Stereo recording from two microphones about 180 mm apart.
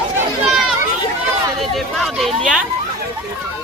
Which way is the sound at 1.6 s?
Centre (ahead or behind).